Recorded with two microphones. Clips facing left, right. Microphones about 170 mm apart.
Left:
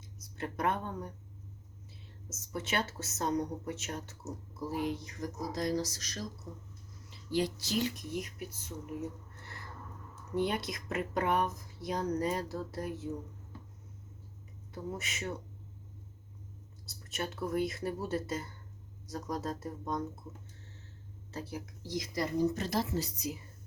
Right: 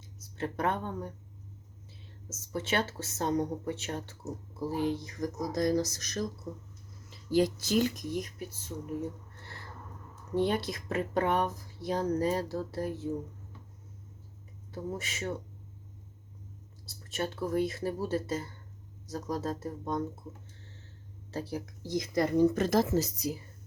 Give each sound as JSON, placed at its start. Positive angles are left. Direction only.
{"t": 0.3, "sound": "speech", "side_deg": -30}
{"t": 2.3, "sound": "speech", "side_deg": -30}
{"t": 10.3, "sound": "speech", "side_deg": -30}
{"t": 14.7, "sound": "speech", "side_deg": -30}
{"t": 16.8, "sound": "speech", "side_deg": -30}
{"t": 21.3, "sound": "speech", "side_deg": -35}
{"t": 21.8, "sound": "speech", "side_deg": -55}